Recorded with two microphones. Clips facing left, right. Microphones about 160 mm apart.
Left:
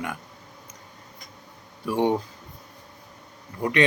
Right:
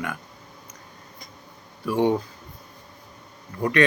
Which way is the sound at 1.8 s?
20° left (ahead or behind).